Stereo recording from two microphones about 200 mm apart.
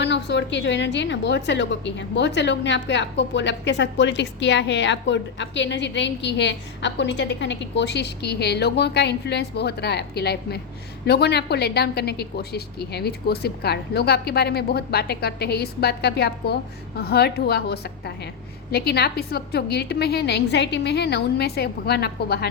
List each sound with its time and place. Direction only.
0.0 s a woman's voice: 60° left (ahead or behind)